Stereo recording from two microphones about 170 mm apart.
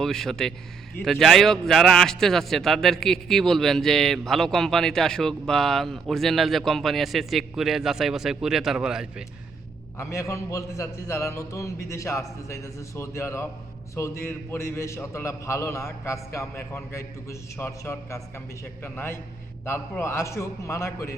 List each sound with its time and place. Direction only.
0.0 s a man's voice: centre (ahead or behind)
10.0 s a man's voice: 15° left (ahead or behind)